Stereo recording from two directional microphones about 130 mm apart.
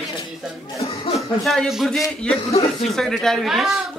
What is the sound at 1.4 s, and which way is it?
Speech, centre (ahead or behind).